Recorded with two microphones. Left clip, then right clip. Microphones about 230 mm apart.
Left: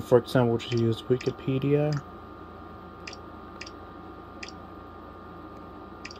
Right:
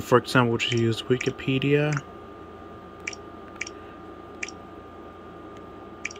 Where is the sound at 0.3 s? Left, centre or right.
Right.